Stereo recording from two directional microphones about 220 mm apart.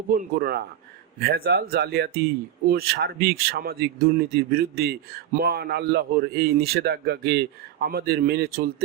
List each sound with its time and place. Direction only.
0.1 s speech: 40° right (ahead or behind)